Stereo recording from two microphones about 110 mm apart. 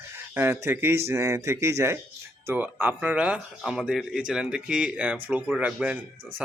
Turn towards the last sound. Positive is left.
turn(degrees=-10)  # may be behind; listen again after turning